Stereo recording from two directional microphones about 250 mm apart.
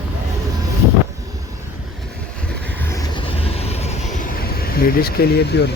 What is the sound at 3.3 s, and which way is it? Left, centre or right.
Vehicle, left.